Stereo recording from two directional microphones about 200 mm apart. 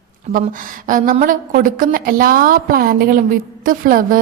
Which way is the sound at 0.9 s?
40° right (ahead or behind).